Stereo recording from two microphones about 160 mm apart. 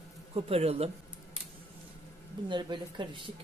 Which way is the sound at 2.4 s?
30° right (ahead or behind).